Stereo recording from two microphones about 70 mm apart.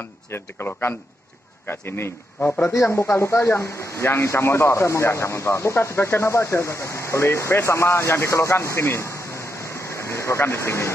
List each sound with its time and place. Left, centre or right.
0.3 s speech: left